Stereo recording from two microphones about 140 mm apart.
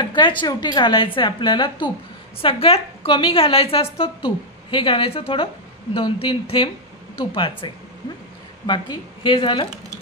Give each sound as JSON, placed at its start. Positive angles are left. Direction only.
{"t": 0.0, "sound": "a woman's voice", "side_deg": 35}